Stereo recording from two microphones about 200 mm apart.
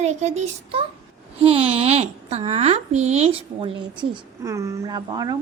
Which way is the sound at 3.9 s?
20° right (ahead or behind).